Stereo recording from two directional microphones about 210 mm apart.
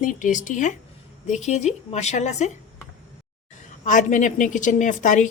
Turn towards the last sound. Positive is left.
turn(degrees=35)  # may be behind; listen again after turning